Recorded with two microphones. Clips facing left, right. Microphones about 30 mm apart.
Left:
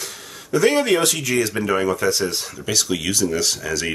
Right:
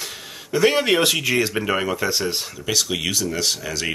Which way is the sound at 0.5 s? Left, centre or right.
Right.